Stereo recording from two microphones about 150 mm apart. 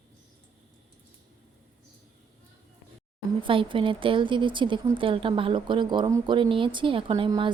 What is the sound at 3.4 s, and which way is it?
A woman's voice, 35° right (ahead or behind).